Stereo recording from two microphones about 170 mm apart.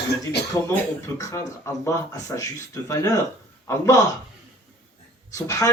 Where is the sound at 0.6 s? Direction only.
20° left (ahead or behind).